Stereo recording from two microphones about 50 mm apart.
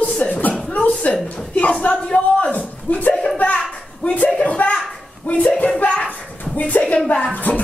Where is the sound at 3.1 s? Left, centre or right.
Centre.